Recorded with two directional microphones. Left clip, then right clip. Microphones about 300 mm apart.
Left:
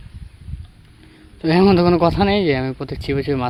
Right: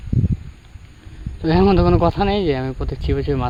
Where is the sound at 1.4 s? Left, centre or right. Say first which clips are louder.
Left 1 dB; centre.